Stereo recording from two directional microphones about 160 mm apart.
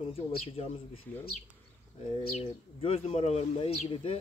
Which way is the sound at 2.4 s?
40° left (ahead or behind).